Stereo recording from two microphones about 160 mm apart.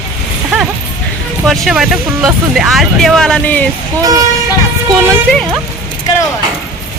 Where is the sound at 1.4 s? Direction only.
Centre (ahead or behind).